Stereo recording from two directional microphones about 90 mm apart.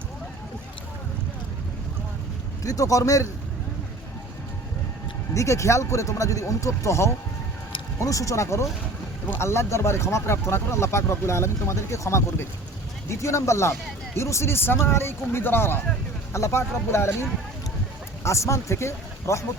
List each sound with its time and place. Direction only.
2.6 s speech: 40° left (ahead or behind)
5.3 s speech: 35° left (ahead or behind)